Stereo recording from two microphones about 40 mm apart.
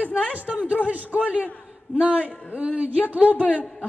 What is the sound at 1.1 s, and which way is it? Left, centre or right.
Speech, right.